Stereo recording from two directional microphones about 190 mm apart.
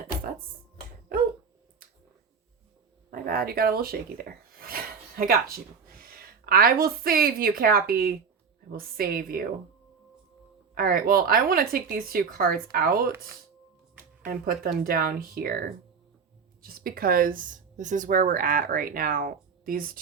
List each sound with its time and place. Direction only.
3.1 s a woman's voice: 50° right (ahead or behind)
10.8 s speech: 50° right (ahead or behind)
13.1 s speech: 10° right (ahead or behind)
14.3 s speech: 50° right (ahead or behind)
16.8 s speech: 50° right (ahead or behind)